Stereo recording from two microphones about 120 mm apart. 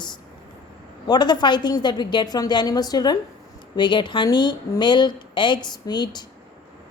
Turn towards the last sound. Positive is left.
turn(degrees=35)  # may be behind; listen again after turning